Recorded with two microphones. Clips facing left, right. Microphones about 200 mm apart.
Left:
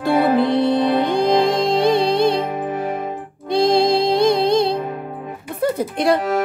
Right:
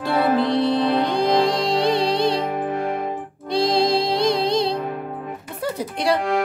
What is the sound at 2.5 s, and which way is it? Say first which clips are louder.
Music: left 1 dB; 5° left (ahead or behind).